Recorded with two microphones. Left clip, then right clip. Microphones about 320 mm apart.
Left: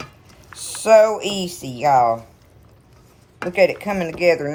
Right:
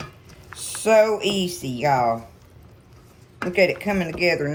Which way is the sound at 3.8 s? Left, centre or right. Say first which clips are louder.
Left 3 dB; centre.